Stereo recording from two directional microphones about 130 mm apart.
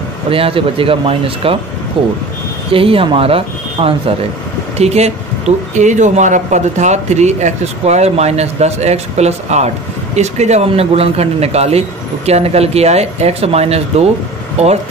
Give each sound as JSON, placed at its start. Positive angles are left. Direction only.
{"t": 0.3, "sound": "speech", "side_deg": -45}
{"t": 5.8, "sound": "speech", "side_deg": -70}